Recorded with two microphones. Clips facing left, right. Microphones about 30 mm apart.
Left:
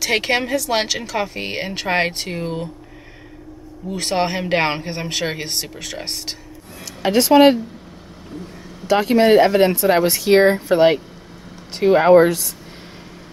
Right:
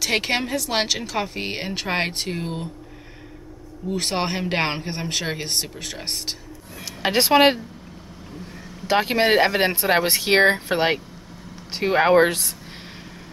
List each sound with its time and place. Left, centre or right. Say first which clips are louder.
0.0 s speech: left 3 dB; centre
3.9 s speech: left 4 dB; centre
7.0 s speech: left 4 dB; right
8.8 s speech: left 5 dB; right
10.0 s speech: left 3 dB; right
11.7 s speech: left 6 dB; centre
12.2 s speech: left 4 dB; right